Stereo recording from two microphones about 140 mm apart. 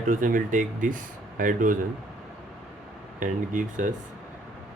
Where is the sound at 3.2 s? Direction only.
65° right (ahead or behind).